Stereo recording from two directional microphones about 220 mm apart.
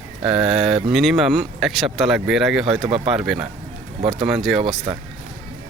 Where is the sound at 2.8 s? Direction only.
25° right (ahead or behind).